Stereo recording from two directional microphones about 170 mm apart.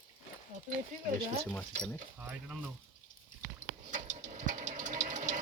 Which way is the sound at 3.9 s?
50° right (ahead or behind).